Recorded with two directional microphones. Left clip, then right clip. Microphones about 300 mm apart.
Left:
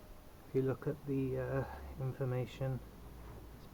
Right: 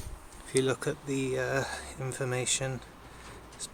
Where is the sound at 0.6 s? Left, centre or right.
Centre.